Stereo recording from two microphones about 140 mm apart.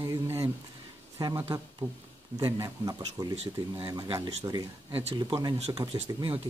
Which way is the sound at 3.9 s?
25° right (ahead or behind).